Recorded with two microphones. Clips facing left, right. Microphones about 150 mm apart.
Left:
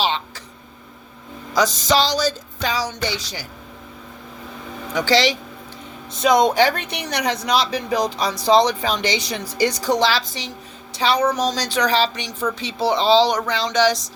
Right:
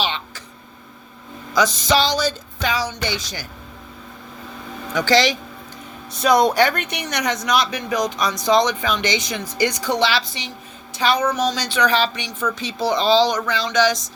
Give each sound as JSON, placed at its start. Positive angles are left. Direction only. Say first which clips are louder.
{"t": 0.0, "sound": "a sound", "louder": "left 3 dB", "side_deg": 35}
{"t": 1.5, "sound": "speech", "louder": "even", "side_deg": 40}
{"t": 4.9, "sound": "speech", "louder": "right 1 dB", "side_deg": 30}